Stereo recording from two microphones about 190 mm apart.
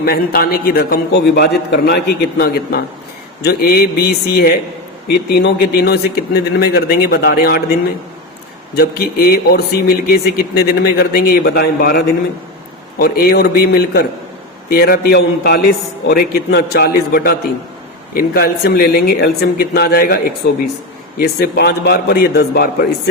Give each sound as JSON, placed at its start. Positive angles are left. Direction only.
{"t": 0.0, "sound": "a man's voice", "side_deg": 55}
{"t": 8.7, "sound": "a man's voice", "side_deg": 55}